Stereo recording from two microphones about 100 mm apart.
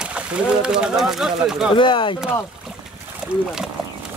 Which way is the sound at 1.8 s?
55° left (ahead or behind).